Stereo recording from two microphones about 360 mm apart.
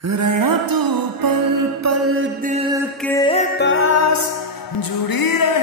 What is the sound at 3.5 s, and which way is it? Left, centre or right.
Music, left.